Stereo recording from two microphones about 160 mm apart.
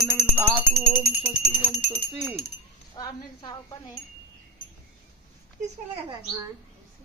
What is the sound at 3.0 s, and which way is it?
Speech, 25° left (ahead or behind).